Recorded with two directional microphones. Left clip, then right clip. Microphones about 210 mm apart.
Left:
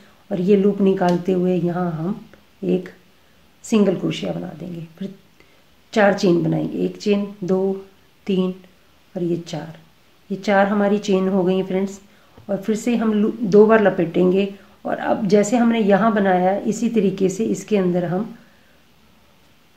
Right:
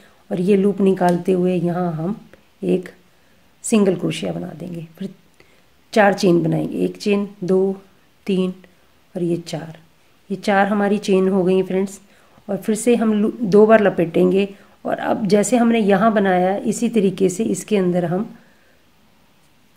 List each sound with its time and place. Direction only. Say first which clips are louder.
0.3 s speech: even; 35° right (ahead or behind)